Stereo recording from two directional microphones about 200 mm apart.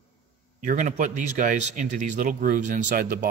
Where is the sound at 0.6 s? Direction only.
40° right (ahead or behind).